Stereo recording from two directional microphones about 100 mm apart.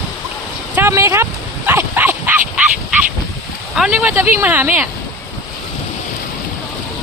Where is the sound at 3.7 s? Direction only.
5° right (ahead or behind).